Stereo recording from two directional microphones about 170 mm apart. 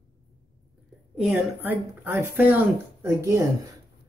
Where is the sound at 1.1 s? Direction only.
Centre (ahead or behind); by 3.4 s 15° right (ahead or behind).